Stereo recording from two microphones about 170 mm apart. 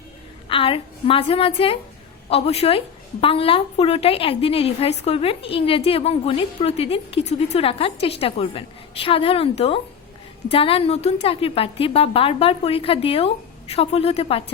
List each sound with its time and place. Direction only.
0.4 s a woman's voice: 30° left (ahead or behind)